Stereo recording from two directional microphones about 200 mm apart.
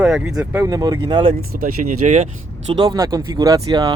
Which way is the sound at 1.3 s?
45° right (ahead or behind).